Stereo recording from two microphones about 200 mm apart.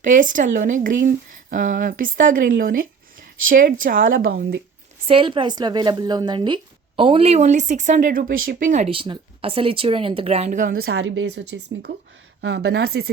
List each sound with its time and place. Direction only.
0.0 s speech: 40° right (ahead or behind)
5.0 s a woman's voice: 25° right (ahead or behind); by 13.1 s 50° right (ahead or behind)